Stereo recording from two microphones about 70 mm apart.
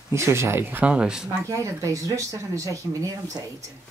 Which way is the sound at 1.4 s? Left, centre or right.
Right.